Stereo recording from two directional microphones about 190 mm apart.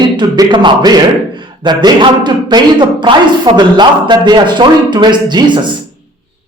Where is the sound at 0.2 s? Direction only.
25° right (ahead or behind).